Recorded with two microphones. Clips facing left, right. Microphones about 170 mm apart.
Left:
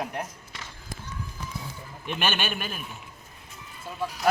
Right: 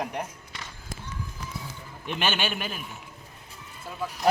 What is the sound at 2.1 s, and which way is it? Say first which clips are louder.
Speech: right 1 dB; 15° right (ahead or behind).